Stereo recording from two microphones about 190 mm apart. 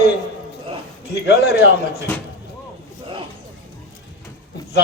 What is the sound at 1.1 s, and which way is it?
Speech, 60° left (ahead or behind).